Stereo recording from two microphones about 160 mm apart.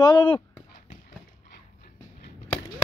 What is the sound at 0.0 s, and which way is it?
Speech, 30° left (ahead or behind).